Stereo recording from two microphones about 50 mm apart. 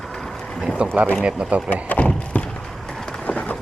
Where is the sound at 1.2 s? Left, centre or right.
Centre.